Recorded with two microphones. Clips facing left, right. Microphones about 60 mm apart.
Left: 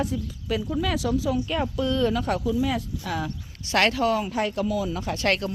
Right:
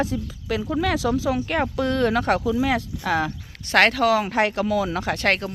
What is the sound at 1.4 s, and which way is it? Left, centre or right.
Speech, right.